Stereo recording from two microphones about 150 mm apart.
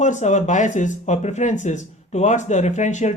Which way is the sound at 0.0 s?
50° left (ahead or behind).